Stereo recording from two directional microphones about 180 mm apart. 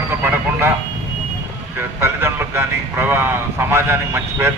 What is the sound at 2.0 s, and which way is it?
A man's voice, 15° right (ahead or behind).